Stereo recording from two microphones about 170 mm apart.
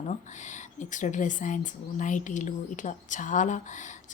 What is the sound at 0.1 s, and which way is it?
A woman's voice, 45° left (ahead or behind).